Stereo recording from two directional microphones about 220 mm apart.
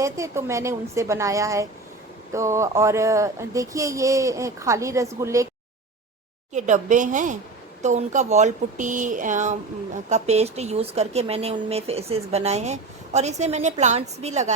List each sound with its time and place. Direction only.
0.0 s speech: 15° right (ahead or behind)
6.5 s speech: 35° right (ahead or behind)